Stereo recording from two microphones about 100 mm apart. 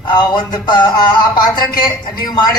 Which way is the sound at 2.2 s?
45° left (ahead or behind).